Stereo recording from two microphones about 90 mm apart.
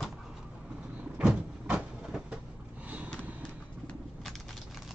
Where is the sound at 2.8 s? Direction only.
15° right (ahead or behind).